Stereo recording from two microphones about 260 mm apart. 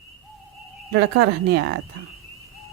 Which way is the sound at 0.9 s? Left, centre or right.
Right.